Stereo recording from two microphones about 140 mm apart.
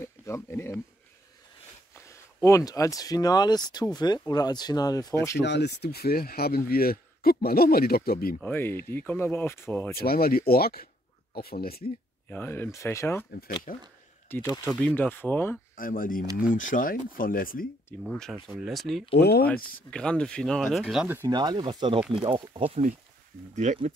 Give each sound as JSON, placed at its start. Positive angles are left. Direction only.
{"t": 0.0, "sound": "speech", "side_deg": 20}
{"t": 2.0, "sound": "speech", "side_deg": 20}
{"t": 6.0, "sound": "speech", "side_deg": 90}
{"t": 8.4, "sound": "speech", "side_deg": 15}
{"t": 9.9, "sound": "speech", "side_deg": 90}
{"t": 12.3, "sound": "speech", "side_deg": 15}
{"t": 13.7, "sound": "speech", "side_deg": 70}
{"t": 14.4, "sound": "speech", "side_deg": 25}
{"t": 15.7, "sound": "speech", "side_deg": 85}
{"t": 16.3, "sound": "speech", "side_deg": 70}
{"t": 17.2, "sound": "speech", "side_deg": 85}
{"t": 18.0, "sound": "speech", "side_deg": 5}
{"t": 21.3, "sound": "speech", "side_deg": -30}
{"t": 23.5, "sound": "speech", "side_deg": -60}